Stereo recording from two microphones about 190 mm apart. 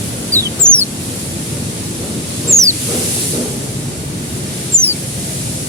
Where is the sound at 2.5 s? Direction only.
15° right (ahead or behind).